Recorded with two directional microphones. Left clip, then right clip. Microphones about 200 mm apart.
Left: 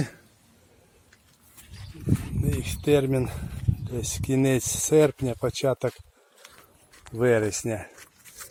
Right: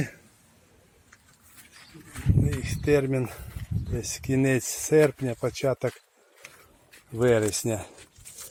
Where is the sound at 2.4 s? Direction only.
10° left (ahead or behind).